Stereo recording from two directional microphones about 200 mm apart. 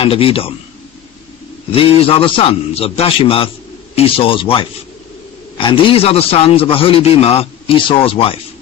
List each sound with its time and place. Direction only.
0.0 s a man's voice: 30° left (ahead or behind)
1.7 s a man's voice: 25° left (ahead or behind)